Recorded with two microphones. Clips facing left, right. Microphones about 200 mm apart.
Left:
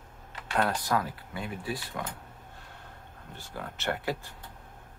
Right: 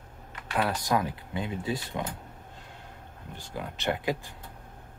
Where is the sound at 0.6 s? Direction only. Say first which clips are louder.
Right 1 dB; 10° right (ahead or behind).